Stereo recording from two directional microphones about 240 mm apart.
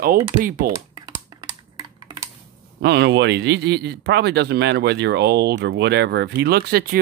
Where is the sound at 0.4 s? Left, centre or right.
Right.